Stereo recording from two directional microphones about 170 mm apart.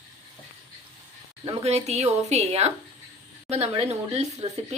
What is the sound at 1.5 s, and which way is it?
Speech, 40° right (ahead or behind).